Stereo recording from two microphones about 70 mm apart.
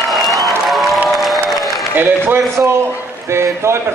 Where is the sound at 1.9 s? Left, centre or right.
Right.